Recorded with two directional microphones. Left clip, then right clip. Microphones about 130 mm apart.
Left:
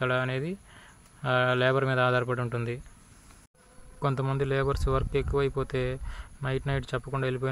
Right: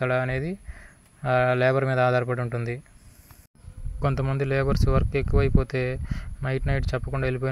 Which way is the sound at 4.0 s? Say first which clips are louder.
Right 2 dB; 25° right (ahead or behind).